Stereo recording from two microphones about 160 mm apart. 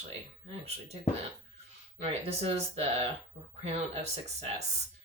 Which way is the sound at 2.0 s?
40° right (ahead or behind).